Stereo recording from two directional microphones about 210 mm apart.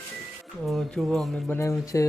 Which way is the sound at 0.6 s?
Centre (ahead or behind).